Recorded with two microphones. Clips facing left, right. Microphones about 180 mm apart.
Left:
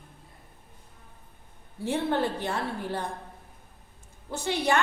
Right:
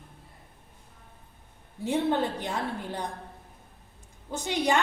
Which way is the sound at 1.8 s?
15° right (ahead or behind).